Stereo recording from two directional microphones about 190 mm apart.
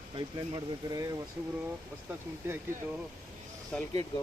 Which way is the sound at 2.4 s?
15° right (ahead or behind).